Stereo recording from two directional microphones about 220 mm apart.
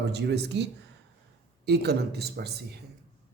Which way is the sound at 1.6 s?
45° right (ahead or behind).